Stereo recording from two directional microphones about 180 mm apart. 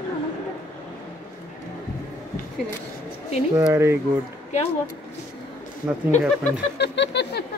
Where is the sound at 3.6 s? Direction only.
15° right (ahead or behind).